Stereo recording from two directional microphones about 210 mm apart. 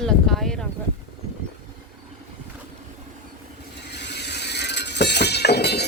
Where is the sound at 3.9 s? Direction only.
55° left (ahead or behind).